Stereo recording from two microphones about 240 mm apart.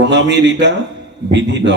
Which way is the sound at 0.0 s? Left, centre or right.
Right.